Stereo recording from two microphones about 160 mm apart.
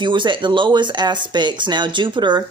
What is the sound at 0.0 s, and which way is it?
Speech, 30° right (ahead or behind).